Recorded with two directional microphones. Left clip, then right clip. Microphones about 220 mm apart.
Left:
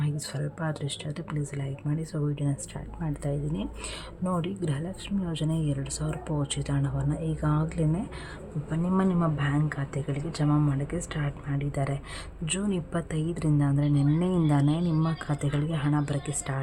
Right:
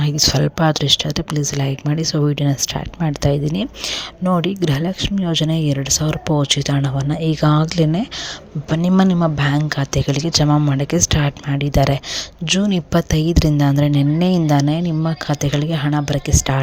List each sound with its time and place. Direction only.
0.0 s a woman's voice: 35° right (ahead or behind)